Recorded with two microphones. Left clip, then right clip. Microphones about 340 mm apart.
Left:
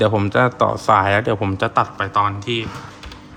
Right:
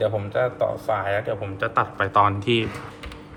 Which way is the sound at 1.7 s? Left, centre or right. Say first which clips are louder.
Even; centre.